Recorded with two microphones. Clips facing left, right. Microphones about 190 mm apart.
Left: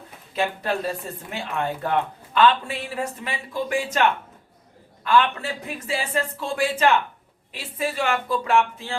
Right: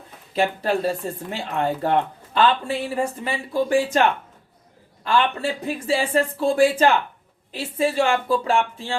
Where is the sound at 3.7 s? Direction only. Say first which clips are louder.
Right 2 dB; 30° right (ahead or behind).